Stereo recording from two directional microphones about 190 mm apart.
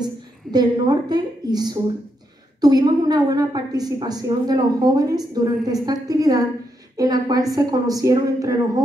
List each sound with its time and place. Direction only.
0.0 s a woman's voice: 20° right (ahead or behind)